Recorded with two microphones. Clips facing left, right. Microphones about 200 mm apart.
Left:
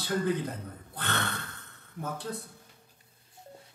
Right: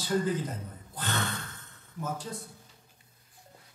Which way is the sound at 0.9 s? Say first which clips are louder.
Even; 60° left (ahead or behind).